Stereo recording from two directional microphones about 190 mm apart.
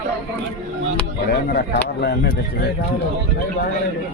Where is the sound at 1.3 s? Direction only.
55° left (ahead or behind).